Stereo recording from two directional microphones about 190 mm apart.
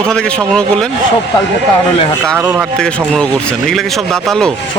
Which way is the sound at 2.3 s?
10° right (ahead or behind).